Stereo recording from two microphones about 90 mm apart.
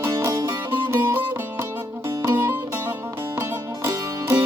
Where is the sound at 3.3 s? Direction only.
35° right (ahead or behind).